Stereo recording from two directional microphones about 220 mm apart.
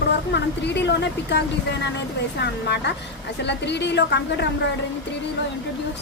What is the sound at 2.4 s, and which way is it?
Speech, 50° left (ahead or behind).